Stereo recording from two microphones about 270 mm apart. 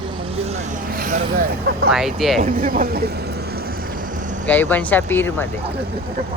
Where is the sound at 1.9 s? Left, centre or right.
Centre.